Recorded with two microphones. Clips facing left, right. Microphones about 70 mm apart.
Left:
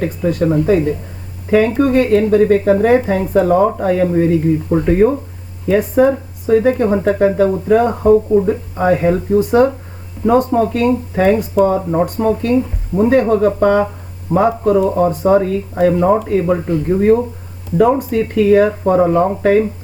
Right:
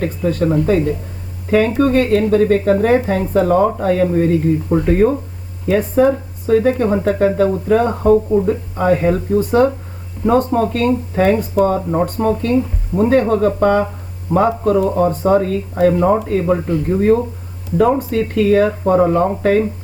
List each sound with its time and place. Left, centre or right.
0.0 s speech: centre